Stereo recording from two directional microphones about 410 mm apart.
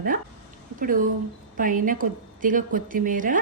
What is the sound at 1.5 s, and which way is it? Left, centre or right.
A woman's voice, centre.